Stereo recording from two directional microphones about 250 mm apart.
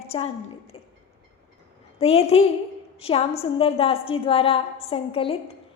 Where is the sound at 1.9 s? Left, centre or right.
Left.